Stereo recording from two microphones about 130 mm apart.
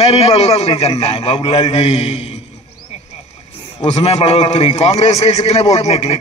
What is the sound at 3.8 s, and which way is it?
A man's voice, 55° left (ahead or behind).